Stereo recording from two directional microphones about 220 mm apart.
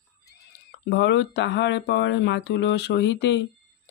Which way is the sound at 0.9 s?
50° left (ahead or behind).